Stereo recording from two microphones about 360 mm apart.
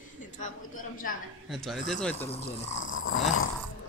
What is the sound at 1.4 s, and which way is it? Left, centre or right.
Speech, centre.